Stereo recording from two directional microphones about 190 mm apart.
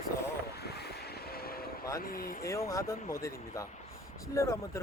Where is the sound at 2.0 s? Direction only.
50° left (ahead or behind).